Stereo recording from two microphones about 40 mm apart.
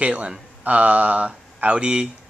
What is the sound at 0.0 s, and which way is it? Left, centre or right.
Speech, right.